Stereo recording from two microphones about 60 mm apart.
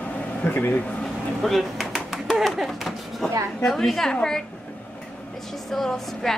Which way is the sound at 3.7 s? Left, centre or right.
Centre.